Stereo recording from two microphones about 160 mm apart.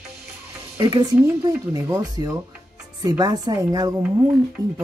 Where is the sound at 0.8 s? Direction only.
25° right (ahead or behind).